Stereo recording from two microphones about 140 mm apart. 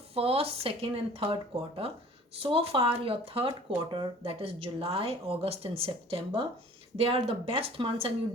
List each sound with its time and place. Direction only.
0.1 s speech: 45° right (ahead or behind)